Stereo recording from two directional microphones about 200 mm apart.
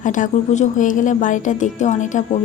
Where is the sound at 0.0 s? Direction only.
40° left (ahead or behind).